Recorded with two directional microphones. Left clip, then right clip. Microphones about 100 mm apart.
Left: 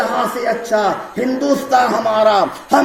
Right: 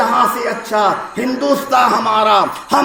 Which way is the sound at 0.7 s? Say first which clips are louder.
Right 5 dB; 40° left (ahead or behind).